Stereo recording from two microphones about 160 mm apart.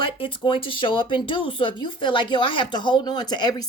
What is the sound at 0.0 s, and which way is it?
A woman's voice, 30° left (ahead or behind).